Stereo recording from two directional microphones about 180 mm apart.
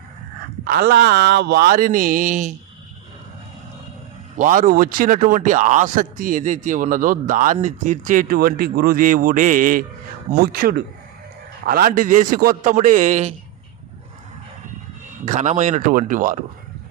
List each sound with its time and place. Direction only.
0.6 s speech: 55° right (ahead or behind)
4.4 s a man's voice: 50° right (ahead or behind)
15.2 s a man's voice: 40° right (ahead or behind)